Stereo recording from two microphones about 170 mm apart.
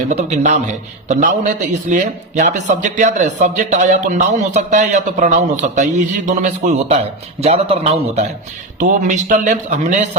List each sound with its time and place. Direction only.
0.1 s a man's voice: 45° right (ahead or behind)